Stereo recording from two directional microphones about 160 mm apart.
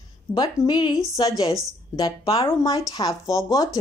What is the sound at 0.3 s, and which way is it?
A woman's voice, 25° left (ahead or behind).